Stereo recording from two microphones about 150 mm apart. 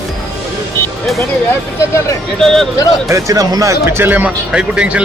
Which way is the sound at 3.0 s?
20° right (ahead or behind).